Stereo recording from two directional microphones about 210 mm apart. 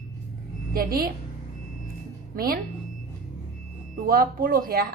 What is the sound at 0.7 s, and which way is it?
Speech, 45° right (ahead or behind).